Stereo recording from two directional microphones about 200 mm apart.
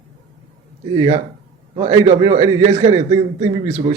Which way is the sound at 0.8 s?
25° right (ahead or behind).